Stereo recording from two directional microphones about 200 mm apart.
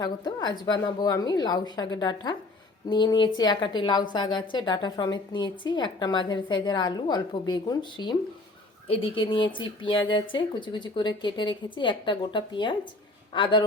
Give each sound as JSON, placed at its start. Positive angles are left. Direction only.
{"t": 0.0, "sound": "a woman's voice", "side_deg": 20}